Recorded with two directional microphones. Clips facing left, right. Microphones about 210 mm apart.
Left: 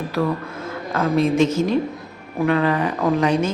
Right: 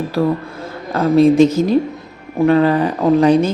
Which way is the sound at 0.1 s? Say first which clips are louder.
Right 4 dB; 35° right (ahead or behind).